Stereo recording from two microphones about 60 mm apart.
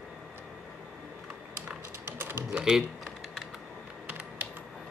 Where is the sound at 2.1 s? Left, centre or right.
Right.